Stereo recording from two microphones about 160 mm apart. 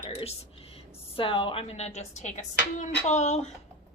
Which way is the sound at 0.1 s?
40° left (ahead or behind).